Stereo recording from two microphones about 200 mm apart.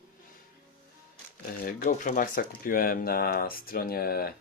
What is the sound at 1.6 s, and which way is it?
Speech, 45° left (ahead or behind).